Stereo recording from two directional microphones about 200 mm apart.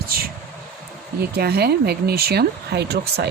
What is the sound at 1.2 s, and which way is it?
Speech, 50° right (ahead or behind).